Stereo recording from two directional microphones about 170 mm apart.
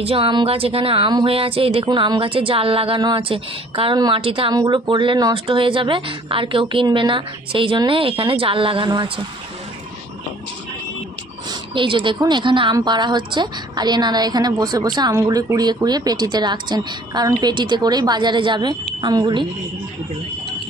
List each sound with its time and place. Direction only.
0.0 s speech: 35° right (ahead or behind)
11.7 s a woman's voice: 30° right (ahead or behind)